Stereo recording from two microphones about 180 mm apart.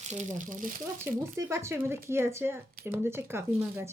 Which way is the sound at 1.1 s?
15° right (ahead or behind).